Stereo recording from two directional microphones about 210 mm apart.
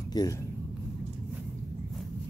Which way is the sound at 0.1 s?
20° left (ahead or behind).